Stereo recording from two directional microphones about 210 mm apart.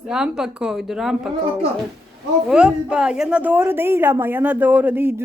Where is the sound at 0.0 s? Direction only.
5° right (ahead or behind).